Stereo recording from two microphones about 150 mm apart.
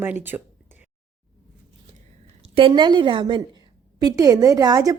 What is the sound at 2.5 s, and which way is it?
A woman's voice, 35° right (ahead or behind).